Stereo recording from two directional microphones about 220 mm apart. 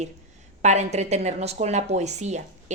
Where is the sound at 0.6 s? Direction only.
30° right (ahead or behind).